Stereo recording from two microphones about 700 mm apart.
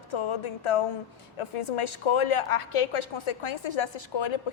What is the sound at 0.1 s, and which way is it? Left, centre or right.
A woman's voice, left.